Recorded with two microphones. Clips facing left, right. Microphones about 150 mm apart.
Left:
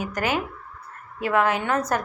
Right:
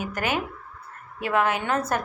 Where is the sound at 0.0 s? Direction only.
25° right (ahead or behind).